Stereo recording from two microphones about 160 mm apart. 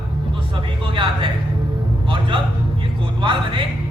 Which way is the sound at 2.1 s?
30° right (ahead or behind).